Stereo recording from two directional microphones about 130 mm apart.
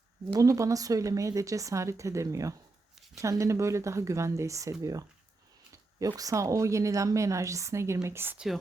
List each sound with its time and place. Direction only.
0.3 s speech: 25° right (ahead or behind)